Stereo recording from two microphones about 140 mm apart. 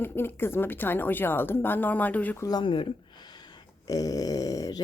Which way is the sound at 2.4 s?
35° left (ahead or behind).